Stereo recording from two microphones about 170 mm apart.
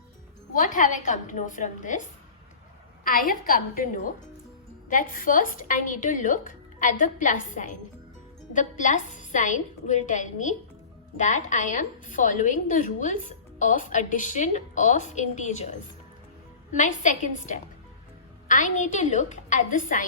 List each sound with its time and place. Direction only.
0.5 s a woman's voice: 50° left (ahead or behind)
3.0 s a woman's voice: 55° left (ahead or behind)